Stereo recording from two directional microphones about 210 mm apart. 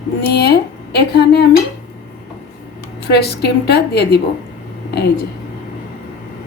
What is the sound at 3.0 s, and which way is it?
A woman's voice, 50° left (ahead or behind).